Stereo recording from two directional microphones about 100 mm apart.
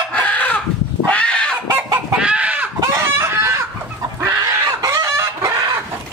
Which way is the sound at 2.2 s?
10° right (ahead or behind).